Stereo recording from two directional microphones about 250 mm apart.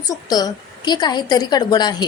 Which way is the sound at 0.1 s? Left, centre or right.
Centre.